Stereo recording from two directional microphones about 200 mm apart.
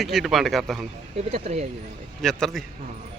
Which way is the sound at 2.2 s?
Centre (ahead or behind).